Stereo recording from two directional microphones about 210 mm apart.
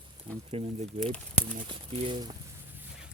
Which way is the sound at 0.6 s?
25° right (ahead or behind).